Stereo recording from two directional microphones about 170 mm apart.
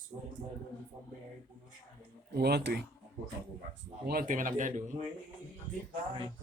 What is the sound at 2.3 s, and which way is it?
Speech, 70° right (ahead or behind).